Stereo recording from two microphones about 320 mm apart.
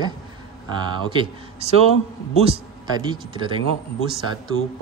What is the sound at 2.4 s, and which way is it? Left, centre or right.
A man's voice, centre.